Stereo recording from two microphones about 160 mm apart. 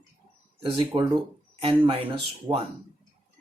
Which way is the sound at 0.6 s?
30° right (ahead or behind).